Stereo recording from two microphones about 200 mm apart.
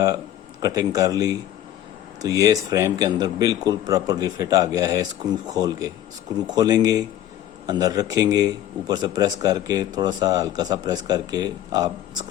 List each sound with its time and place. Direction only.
0.6 s a man's voice: 15° right (ahead or behind)